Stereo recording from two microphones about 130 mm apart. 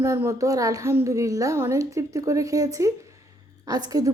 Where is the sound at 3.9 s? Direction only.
25° right (ahead or behind).